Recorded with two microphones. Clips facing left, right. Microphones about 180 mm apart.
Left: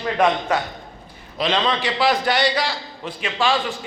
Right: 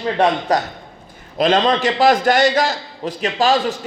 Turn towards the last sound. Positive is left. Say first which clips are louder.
# right 5 dB
turn(degrees=-40)  # may be behind; listen again after turning